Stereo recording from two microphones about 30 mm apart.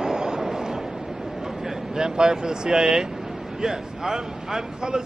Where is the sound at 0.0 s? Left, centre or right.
Right.